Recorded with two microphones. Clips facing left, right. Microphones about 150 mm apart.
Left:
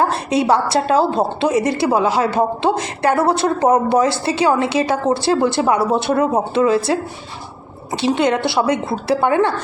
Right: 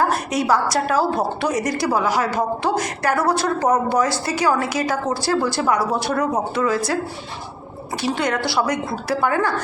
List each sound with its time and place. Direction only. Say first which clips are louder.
0.1 s a woman's voice: left 3 dB; 25° left (ahead or behind)
8.0 s a woman's voice: left 6 dB; 20° left (ahead or behind)